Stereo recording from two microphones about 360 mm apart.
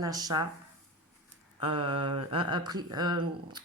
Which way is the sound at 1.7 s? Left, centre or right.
Centre.